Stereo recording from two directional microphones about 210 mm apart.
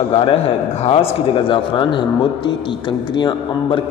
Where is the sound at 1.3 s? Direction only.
25° left (ahead or behind).